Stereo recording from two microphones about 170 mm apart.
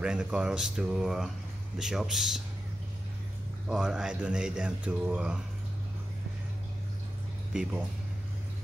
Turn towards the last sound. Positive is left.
turn(degrees=-5)  # may be behind; listen again after turning